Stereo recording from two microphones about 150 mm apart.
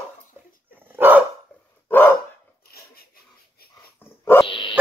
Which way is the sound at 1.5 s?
10° left (ahead or behind).